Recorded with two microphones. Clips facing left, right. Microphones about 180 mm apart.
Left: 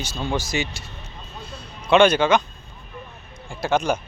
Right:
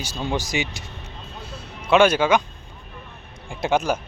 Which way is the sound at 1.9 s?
5° right (ahead or behind).